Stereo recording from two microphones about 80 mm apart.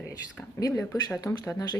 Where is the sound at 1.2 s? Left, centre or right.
Left.